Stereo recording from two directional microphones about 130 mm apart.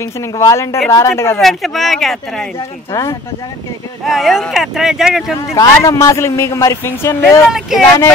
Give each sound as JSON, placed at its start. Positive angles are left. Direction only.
{"t": 0.0, "sound": "speech", "side_deg": 25}
{"t": 1.4, "sound": "speech", "side_deg": 0}
{"t": 2.9, "sound": "speech", "side_deg": 25}
{"t": 4.0, "sound": "speech", "side_deg": 0}
{"t": 5.6, "sound": "speech", "side_deg": 25}
{"t": 7.4, "sound": "speech", "side_deg": -5}